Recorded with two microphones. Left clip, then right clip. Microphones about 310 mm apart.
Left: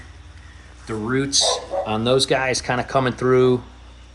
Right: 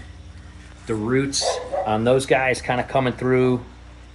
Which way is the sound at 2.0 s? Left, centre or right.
Left.